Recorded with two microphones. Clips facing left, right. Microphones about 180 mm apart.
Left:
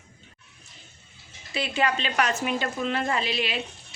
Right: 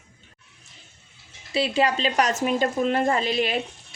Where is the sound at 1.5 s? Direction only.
35° right (ahead or behind).